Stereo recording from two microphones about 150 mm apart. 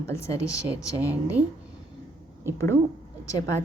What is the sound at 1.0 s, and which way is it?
Speech, 10° right (ahead or behind).